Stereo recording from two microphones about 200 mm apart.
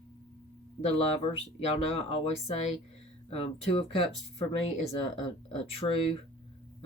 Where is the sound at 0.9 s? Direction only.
30° left (ahead or behind).